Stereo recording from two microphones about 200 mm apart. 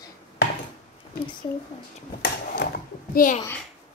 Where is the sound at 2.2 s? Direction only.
50° left (ahead or behind).